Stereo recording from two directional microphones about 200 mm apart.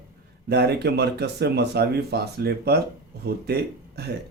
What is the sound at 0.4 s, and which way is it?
Speech, 55° right (ahead or behind).